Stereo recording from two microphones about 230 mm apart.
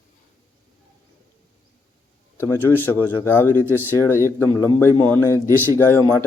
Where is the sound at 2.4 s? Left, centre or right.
Centre.